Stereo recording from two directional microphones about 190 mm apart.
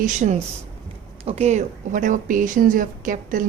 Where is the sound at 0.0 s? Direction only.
40° right (ahead or behind).